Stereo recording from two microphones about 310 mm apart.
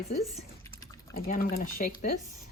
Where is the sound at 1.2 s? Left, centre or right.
Left.